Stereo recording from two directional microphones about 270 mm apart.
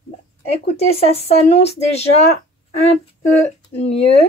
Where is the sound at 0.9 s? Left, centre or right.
Left.